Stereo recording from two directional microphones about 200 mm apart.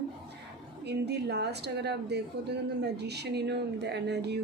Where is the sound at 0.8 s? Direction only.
55° right (ahead or behind).